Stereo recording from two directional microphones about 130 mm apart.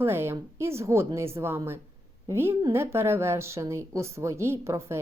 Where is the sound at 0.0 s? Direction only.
20° right (ahead or behind).